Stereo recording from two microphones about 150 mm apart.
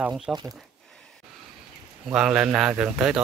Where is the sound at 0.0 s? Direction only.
10° right (ahead or behind).